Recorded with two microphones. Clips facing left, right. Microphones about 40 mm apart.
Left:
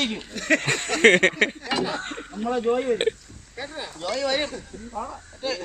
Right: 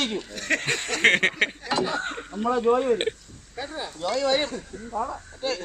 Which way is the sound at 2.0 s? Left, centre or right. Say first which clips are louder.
Right 2 dB; centre.